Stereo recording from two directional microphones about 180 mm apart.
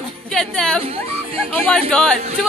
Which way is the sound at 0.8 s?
30° right (ahead or behind).